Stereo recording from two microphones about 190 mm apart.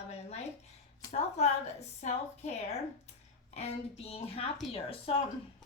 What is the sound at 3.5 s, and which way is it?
A woman's voice, 30° left (ahead or behind).